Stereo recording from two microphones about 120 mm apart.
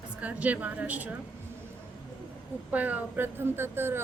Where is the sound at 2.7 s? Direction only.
15° right (ahead or behind).